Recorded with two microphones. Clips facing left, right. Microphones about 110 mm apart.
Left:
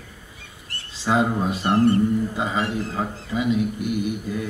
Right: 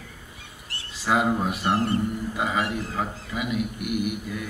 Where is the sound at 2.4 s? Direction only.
25° left (ahead or behind).